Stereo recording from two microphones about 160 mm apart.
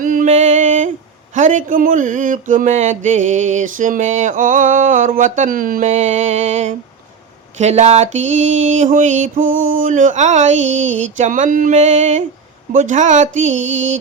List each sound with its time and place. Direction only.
0.0 s music: 55° right (ahead or behind)
1.3 s mantra: 50° right (ahead or behind)